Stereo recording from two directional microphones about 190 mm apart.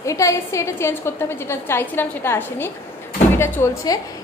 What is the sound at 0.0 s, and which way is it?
A woman's voice, 15° left (ahead or behind).